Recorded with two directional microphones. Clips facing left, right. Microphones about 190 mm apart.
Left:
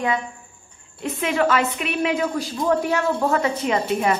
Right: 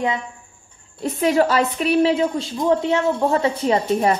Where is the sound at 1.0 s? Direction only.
40° right (ahead or behind).